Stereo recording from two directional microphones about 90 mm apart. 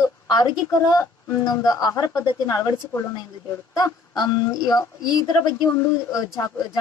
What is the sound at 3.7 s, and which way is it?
Speech, 45° left (ahead or behind).